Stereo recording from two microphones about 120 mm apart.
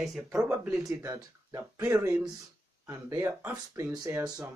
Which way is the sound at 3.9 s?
30° right (ahead or behind).